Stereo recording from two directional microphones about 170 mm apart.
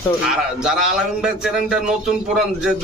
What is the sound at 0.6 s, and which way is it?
A man's voice, 5° right (ahead or behind).